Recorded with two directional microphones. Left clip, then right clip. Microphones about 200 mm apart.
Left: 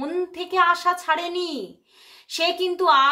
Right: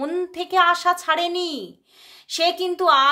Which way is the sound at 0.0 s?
30° right (ahead or behind).